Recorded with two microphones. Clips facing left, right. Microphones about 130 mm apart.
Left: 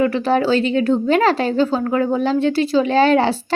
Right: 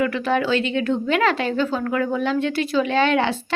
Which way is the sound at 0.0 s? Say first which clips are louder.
Left 4 dB; 35° left (ahead or behind).